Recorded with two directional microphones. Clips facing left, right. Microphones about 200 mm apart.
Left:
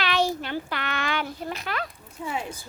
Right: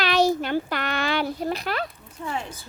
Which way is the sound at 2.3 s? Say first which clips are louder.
Even; 5° left (ahead or behind).